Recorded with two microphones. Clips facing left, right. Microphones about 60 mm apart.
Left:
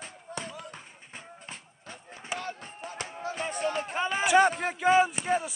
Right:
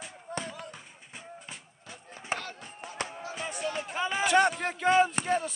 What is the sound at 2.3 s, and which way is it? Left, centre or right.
Chop, right.